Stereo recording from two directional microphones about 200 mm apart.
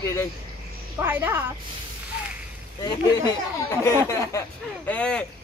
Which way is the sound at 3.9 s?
15° left (ahead or behind).